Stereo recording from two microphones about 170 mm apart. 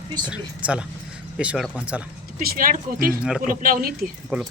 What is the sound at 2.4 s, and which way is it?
Speech, 60° right (ahead or behind).